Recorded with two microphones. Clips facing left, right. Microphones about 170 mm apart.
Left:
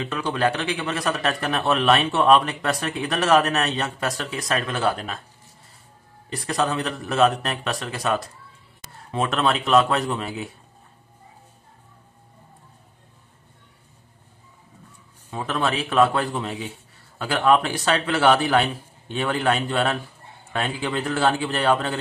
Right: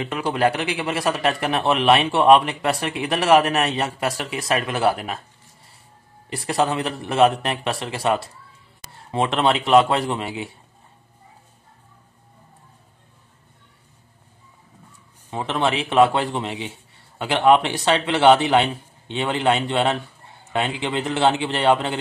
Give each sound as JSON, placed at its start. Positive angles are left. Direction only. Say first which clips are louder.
{"t": 0.0, "sound": "a man's voice", "louder": "right 2 dB", "side_deg": -15}
{"t": 6.4, "sound": "a man's voice", "louder": "right 2 dB", "side_deg": -30}
{"t": 15.3, "sound": "a man's voice", "louder": "right 2 dB", "side_deg": -25}